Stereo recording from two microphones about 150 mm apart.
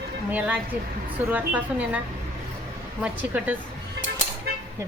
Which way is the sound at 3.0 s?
10° right (ahead or behind).